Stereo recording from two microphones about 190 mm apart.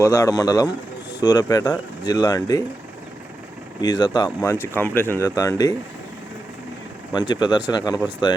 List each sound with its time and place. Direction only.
0.0 s speech: 20° left (ahead or behind)
3.8 s speech: 20° left (ahead or behind)
4.7 s speech: 10° left (ahead or behind)
7.1 s speech: 20° left (ahead or behind)